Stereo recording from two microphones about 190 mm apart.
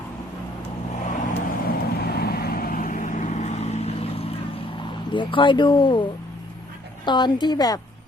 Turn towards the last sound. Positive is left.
turn(degrees=20)  # may be behind; listen again after turning